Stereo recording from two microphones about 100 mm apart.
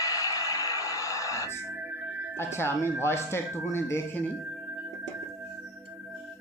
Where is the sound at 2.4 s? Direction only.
25° left (ahead or behind).